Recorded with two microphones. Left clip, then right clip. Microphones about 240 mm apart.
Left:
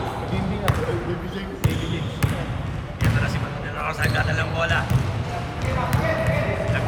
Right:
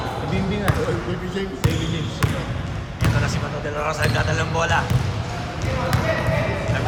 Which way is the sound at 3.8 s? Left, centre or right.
Centre.